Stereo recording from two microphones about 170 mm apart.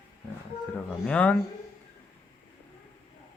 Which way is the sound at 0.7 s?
10° left (ahead or behind).